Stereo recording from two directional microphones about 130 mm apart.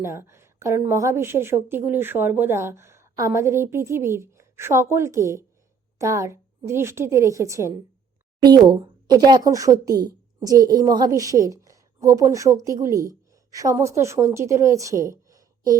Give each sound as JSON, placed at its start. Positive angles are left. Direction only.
{"t": 0.0, "sound": "a woman's voice", "side_deg": -20}